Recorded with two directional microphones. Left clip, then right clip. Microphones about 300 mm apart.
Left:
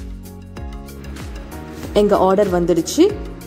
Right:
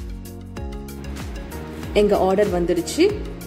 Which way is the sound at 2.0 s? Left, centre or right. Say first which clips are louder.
Left 3 dB; centre.